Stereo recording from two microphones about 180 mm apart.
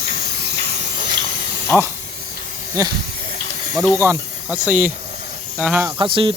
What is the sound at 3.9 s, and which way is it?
Speech, 10° right (ahead or behind).